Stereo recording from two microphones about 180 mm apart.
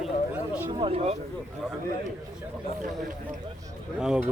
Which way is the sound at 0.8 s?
35° right (ahead or behind).